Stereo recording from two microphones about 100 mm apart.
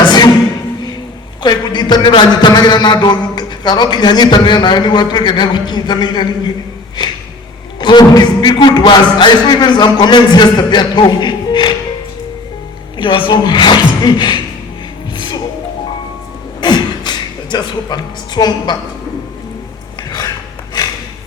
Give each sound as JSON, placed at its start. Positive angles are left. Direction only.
{"t": 1.4, "sound": "a man's voice", "side_deg": 50}
{"t": 7.8, "sound": "a man's voice", "side_deg": 45}
{"t": 13.0, "sound": "a man's voice", "side_deg": 55}
{"t": 15.1, "sound": "music", "side_deg": 50}
{"t": 16.6, "sound": "beatboxing", "side_deg": 45}
{"t": 20.0, "sound": "a sound", "side_deg": 45}